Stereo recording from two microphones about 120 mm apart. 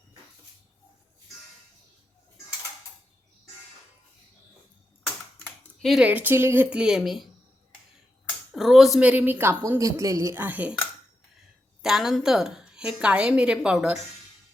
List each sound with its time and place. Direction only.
5.4 s typing: centre (ahead or behind)
6.1 s a woman's voice: 15° right (ahead or behind)
8.5 s a woman's voice: centre (ahead or behind)
11.8 s a woman's voice: 5° right (ahead or behind)